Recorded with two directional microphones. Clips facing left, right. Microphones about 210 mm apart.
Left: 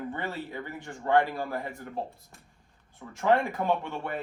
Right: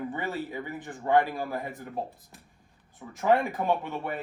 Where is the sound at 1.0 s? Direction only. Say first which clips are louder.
Right 1 dB; 15° right (ahead or behind).